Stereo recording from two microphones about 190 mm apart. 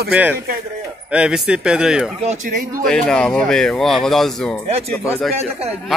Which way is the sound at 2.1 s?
40° right (ahead or behind).